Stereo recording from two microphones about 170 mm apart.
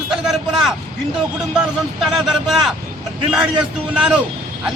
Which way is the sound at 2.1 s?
5° right (ahead or behind).